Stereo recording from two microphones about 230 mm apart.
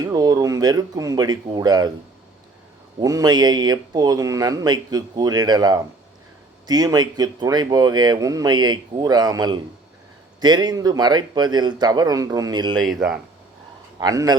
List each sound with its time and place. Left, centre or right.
0.0 s speech: centre
3.0 s speech: centre
12.8 s speech: centre
14.0 s speech: centre